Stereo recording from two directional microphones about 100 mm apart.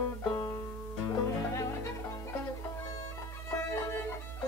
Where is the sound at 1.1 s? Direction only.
30° left (ahead or behind).